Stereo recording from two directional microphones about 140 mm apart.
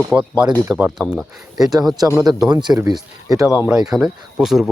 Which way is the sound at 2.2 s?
25° right (ahead or behind).